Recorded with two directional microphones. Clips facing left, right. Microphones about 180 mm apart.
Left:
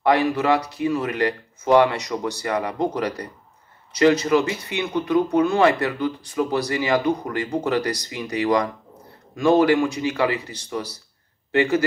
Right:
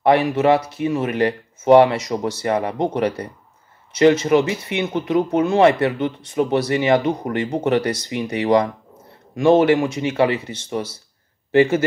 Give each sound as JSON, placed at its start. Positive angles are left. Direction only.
{"t": 0.0, "sound": "speech", "side_deg": -25}